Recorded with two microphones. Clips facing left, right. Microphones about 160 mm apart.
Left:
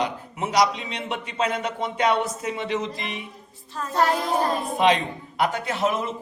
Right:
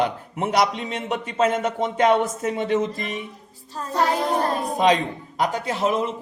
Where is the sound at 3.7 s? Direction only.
35° right (ahead or behind).